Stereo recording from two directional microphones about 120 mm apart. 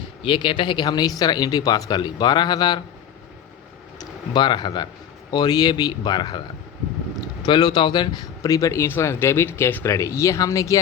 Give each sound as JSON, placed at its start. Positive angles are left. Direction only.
{"t": 0.2, "sound": "speech", "side_deg": 45}
{"t": 4.4, "sound": "speech", "side_deg": 40}
{"t": 7.4, "sound": "a man's voice", "side_deg": 40}